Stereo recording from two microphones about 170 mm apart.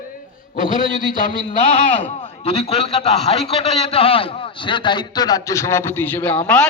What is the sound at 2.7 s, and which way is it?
A man's voice, 35° left (ahead or behind).